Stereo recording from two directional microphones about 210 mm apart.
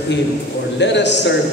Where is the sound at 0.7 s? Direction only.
55° left (ahead or behind).